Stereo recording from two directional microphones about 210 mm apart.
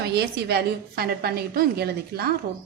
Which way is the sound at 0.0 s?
50° right (ahead or behind).